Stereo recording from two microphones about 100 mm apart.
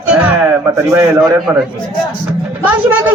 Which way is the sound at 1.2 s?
Centre (ahead or behind).